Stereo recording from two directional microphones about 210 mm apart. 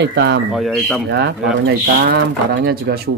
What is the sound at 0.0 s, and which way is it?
Speech, 55° right (ahead or behind).